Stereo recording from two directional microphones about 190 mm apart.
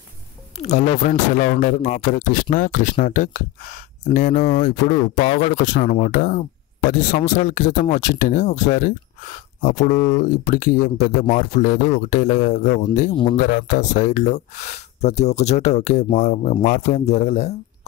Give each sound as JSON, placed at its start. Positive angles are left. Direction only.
{"t": 0.6, "sound": "speech", "side_deg": 35}